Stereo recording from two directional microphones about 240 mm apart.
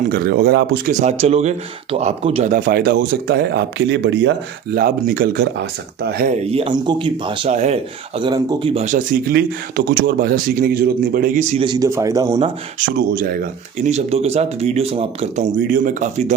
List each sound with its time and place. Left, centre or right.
0.1 s speech: right
0.9 s speech: right
6.3 s speech: right
11.5 s speech: centre
13.0 s speech: right